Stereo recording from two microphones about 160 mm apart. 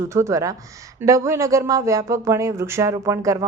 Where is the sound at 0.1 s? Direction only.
20° right (ahead or behind).